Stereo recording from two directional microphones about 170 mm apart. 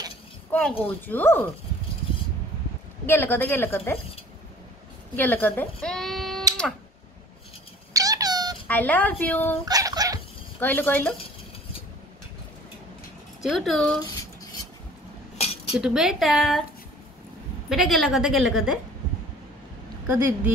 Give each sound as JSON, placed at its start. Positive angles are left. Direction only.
{"t": 0.5, "sound": "a woman's voice", "side_deg": 5}
{"t": 3.1, "sound": "a woman's voice", "side_deg": 10}
{"t": 5.1, "sound": "speech", "side_deg": 10}
{"t": 7.9, "sound": "cat", "side_deg": -20}
{"t": 8.6, "sound": "a woman's voice", "side_deg": 10}
{"t": 9.7, "sound": "dog", "side_deg": -20}
{"t": 10.6, "sound": "a woman's voice", "side_deg": 10}
{"t": 13.4, "sound": "speech", "side_deg": 0}
{"t": 15.3, "sound": "cutlery", "side_deg": 35}
{"t": 15.7, "sound": "speech", "side_deg": -5}
{"t": 17.6, "sound": "speech", "side_deg": 0}